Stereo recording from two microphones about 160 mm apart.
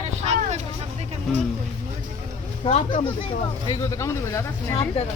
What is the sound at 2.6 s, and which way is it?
Speech, 35° left (ahead or behind).